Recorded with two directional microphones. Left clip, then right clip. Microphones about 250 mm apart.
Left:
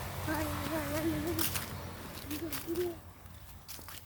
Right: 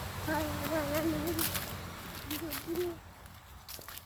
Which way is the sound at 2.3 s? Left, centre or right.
Right.